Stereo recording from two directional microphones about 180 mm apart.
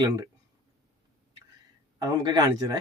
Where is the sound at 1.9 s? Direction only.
20° right (ahead or behind).